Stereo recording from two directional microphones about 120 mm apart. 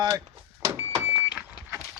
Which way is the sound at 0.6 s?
20° right (ahead or behind).